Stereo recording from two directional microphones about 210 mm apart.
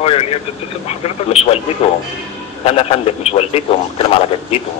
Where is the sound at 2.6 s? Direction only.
30° left (ahead or behind).